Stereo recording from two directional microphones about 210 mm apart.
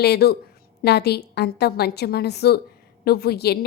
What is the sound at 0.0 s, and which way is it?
A woman's voice, 50° left (ahead or behind).